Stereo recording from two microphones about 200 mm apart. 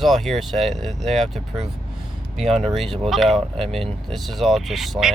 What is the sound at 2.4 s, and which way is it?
Speech, centre (ahead or behind).